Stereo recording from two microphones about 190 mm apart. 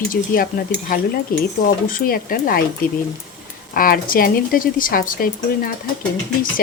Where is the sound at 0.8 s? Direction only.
50° left (ahead or behind).